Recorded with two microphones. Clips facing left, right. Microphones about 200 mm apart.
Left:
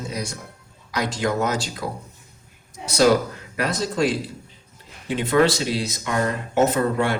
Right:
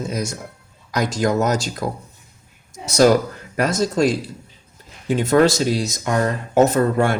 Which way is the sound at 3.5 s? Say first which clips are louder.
Right 5 dB; 45° right (ahead or behind).